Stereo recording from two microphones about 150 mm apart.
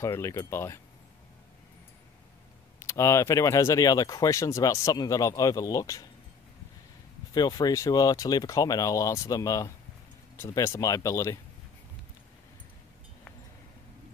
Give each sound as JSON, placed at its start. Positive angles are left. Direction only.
{"t": 0.0, "sound": "speech", "side_deg": 20}
{"t": 2.8, "sound": "speech", "side_deg": 20}
{"t": 7.3, "sound": "speech", "side_deg": 25}